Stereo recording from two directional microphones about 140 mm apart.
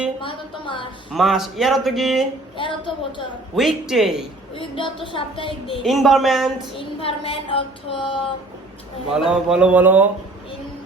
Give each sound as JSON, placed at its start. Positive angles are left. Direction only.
{"t": 0.2, "sound": "child singing", "side_deg": 35}
{"t": 1.1, "sound": "speech", "side_deg": 0}
{"t": 2.6, "sound": "child singing", "side_deg": 35}
{"t": 3.5, "sound": "speech", "side_deg": 0}
{"t": 4.5, "sound": "child singing", "side_deg": 35}
{"t": 5.8, "sound": "speech", "side_deg": 0}
{"t": 6.7, "sound": "child singing", "side_deg": 40}
{"t": 9.1, "sound": "a man's voice", "side_deg": -5}